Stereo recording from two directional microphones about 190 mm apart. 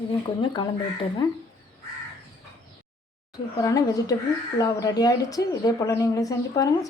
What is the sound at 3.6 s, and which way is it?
Speech, 20° left (ahead or behind).